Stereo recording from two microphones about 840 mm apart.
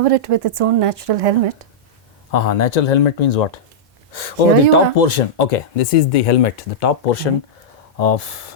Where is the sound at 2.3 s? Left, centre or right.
Left.